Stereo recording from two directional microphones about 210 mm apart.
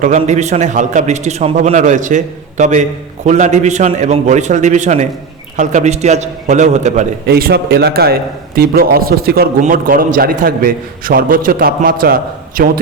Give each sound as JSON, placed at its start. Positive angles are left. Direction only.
{"t": 0.0, "sound": "a man's voice", "side_deg": -35}
{"t": 7.3, "sound": "a man's voice", "side_deg": -45}